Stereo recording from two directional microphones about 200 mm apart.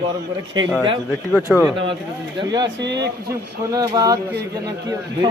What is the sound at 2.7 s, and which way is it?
Speech, 60° right (ahead or behind).